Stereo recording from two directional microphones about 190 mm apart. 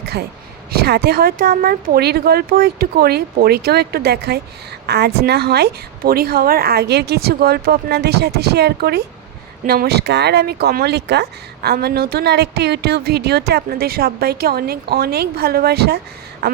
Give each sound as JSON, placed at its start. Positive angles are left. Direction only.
{"t": 0.7, "sound": "speech", "side_deg": -55}